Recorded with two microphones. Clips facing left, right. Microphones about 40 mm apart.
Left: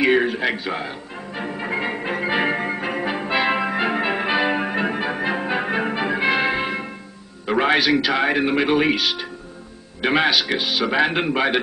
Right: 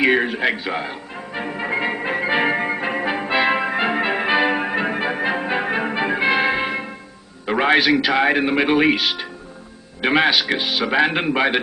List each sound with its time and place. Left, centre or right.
0.0 s music: centre
7.4 s speech: centre
10.0 s speech: centre